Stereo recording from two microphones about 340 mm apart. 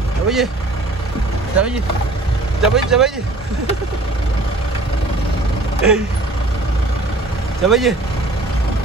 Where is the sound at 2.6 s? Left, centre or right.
Centre.